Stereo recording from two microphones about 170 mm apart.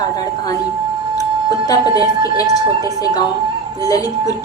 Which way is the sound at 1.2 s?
20° left (ahead or behind).